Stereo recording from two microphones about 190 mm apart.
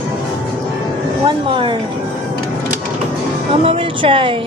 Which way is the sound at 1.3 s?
25° right (ahead or behind).